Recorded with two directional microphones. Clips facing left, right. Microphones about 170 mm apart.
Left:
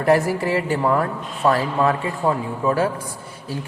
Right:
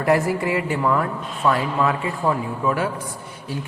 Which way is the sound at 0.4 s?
35° left (ahead or behind).